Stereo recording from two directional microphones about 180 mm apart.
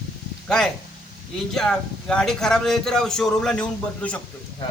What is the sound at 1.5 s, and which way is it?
A man's voice, 5° left (ahead or behind).